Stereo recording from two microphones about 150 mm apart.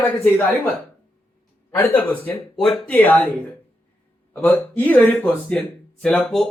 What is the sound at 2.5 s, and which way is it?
Speech, centre (ahead or behind).